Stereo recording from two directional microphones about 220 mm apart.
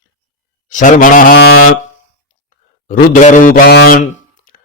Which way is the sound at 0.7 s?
35° left (ahead or behind).